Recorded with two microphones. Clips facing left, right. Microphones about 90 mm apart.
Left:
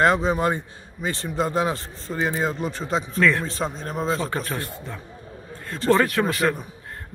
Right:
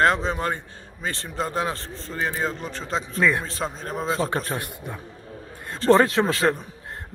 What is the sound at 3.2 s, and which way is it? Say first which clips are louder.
Speech: left 1 dB; 15° right (ahead or behind).